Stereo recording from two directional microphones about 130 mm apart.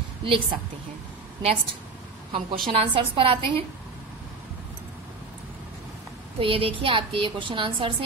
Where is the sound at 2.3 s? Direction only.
45° right (ahead or behind).